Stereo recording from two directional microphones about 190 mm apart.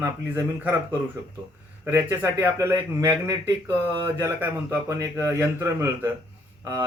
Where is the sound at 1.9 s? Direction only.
15° right (ahead or behind).